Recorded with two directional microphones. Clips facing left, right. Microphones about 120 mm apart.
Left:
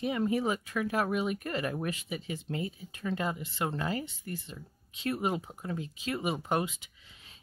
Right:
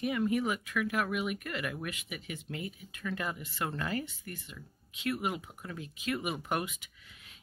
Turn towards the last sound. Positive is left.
turn(degrees=30)  # may be behind; listen again after turning